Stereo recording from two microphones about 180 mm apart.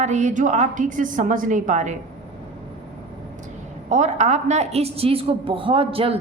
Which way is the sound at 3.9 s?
40° right (ahead or behind).